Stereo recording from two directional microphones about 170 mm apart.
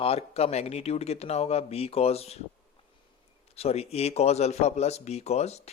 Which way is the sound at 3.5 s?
40° left (ahead or behind).